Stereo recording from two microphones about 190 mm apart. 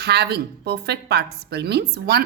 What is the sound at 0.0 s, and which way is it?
A woman's voice, 60° right (ahead or behind).